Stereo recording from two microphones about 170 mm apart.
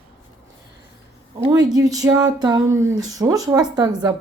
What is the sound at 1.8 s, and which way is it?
Speech, 20° right (ahead or behind).